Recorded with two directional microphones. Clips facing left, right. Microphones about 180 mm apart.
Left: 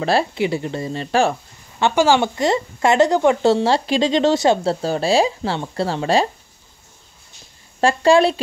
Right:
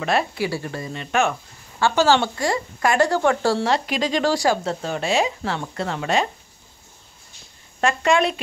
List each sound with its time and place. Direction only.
0.0 s speech: 30° left (ahead or behind)
1.8 s speech: 15° left (ahead or behind)
3.6 s speech: 30° left (ahead or behind)
7.8 s a woman's voice: 30° left (ahead or behind)